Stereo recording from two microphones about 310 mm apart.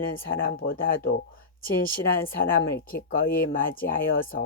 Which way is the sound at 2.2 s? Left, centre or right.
Left.